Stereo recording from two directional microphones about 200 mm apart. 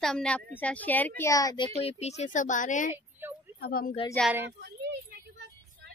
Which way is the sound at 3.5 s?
50° left (ahead or behind).